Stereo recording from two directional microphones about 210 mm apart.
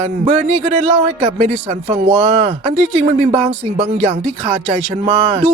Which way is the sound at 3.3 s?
30° right (ahead or behind).